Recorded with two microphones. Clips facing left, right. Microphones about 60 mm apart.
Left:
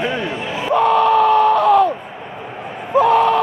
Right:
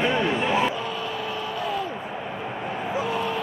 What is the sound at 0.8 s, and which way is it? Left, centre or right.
Yell, left.